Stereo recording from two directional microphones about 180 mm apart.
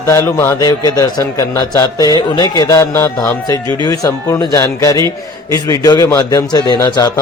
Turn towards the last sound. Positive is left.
turn(degrees=20)  # may be behind; listen again after turning